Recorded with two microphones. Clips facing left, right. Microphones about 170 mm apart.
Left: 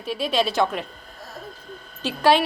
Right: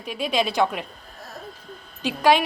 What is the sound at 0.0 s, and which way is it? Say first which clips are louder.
Speech: left 1 dB; 10° right (ahead or behind).